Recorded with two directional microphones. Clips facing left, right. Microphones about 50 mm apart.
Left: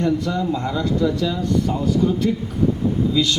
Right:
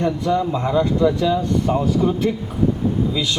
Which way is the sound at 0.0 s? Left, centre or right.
Right.